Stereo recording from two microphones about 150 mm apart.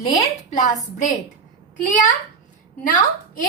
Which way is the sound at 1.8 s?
60° left (ahead or behind).